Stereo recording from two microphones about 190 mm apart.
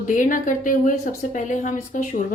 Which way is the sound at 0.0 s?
45° left (ahead or behind).